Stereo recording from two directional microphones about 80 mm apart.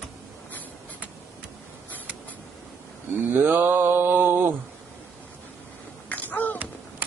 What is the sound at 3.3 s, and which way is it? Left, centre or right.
Mantra, right.